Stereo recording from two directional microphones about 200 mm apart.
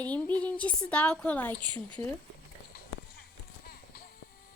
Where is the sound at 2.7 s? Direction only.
50° left (ahead or behind).